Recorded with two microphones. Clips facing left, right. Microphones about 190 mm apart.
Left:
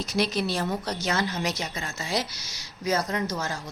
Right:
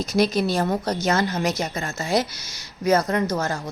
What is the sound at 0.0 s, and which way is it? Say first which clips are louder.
Speech: right 6 dB; 45° right (ahead or behind).